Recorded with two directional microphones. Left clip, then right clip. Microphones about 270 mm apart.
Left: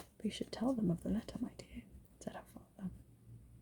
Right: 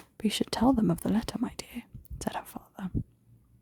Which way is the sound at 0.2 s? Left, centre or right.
Right.